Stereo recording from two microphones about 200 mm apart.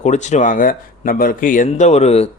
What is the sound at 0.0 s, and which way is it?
Speech, 35° left (ahead or behind).